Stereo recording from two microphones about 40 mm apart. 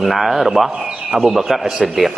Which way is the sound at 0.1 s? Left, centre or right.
Centre.